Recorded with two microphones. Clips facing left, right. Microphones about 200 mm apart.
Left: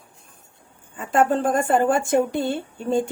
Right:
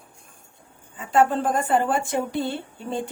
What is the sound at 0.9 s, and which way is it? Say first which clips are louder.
Speech: left 1 dB; 50° left (ahead or behind).